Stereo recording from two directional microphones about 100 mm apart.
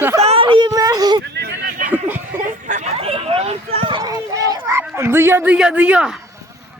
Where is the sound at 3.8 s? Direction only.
45° right (ahead or behind).